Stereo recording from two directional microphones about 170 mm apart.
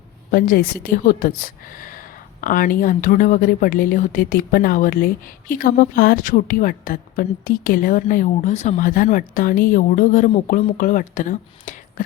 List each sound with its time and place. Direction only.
0.3 s a woman's voice: 60° left (ahead or behind)